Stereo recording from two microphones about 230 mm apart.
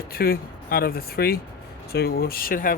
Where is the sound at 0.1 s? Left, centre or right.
Left.